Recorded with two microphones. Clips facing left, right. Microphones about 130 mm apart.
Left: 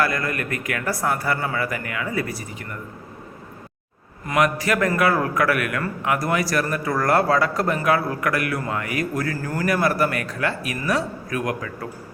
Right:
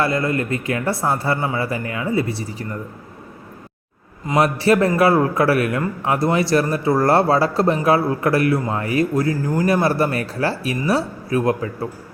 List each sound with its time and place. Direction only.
0.0 s a man's voice: 25° right (ahead or behind)
4.4 s a man's voice: 30° right (ahead or behind)